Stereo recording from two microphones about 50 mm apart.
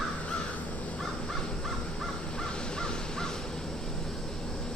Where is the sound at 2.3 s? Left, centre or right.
Centre.